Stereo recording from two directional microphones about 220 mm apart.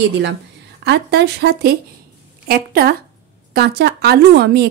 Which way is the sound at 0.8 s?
50° right (ahead or behind).